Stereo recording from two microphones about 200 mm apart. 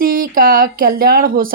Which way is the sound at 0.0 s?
45° right (ahead or behind).